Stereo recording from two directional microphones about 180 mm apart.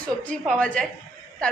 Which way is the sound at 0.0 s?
5° left (ahead or behind).